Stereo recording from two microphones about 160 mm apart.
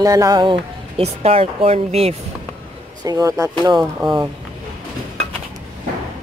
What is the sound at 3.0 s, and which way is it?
Speech, 20° right (ahead or behind).